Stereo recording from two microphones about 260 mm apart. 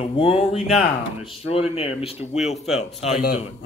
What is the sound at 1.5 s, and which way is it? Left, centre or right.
A man's voice, left.